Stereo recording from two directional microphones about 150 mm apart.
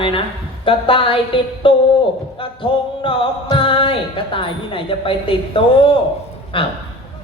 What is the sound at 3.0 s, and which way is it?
Speech, 35° left (ahead or behind).